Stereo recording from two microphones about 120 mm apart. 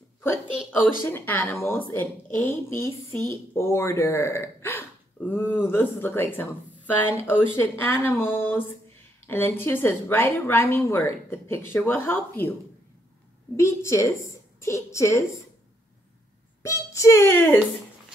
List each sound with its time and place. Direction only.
0.7 s a woman's voice: 15° left (ahead or behind)
13.6 s a woman's voice: 25° left (ahead or behind)
16.6 s a woman's voice: 25° left (ahead or behind)